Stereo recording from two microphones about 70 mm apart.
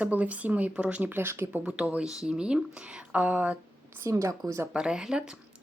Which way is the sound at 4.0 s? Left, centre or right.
Right.